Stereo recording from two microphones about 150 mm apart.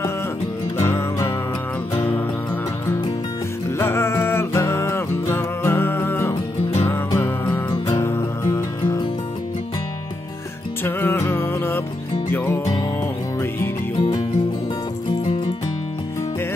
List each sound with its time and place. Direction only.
0.7 s music: 15° left (ahead or behind)
3.7 s music: 20° left (ahead or behind)
7.5 s music: 20° left (ahead or behind)
10.8 s music: 15° left (ahead or behind)